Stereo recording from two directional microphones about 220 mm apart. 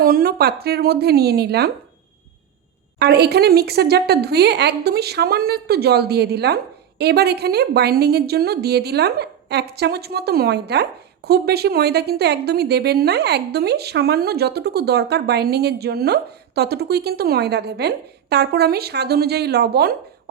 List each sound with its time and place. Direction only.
0.0 s a woman's voice: 40° right (ahead or behind)
3.0 s a woman's voice: 45° right (ahead or behind)